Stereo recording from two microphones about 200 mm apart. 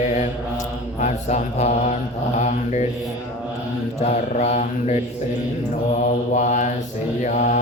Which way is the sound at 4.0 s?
35° left (ahead or behind).